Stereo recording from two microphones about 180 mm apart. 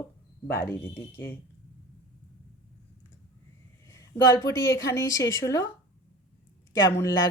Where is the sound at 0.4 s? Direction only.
10° left (ahead or behind).